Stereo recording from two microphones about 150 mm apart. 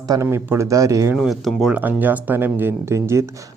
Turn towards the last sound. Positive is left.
turn(degrees=-20)  # may be behind; listen again after turning